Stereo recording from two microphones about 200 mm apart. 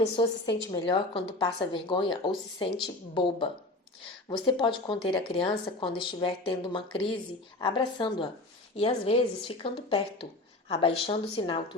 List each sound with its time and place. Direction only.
0.2 s speech: 20° left (ahead or behind)